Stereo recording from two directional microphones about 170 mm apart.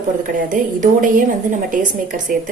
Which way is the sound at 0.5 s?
50° right (ahead or behind).